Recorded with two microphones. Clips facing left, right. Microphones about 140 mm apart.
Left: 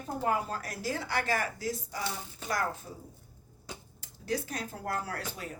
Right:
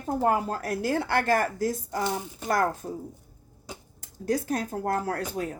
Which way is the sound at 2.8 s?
60° right (ahead or behind).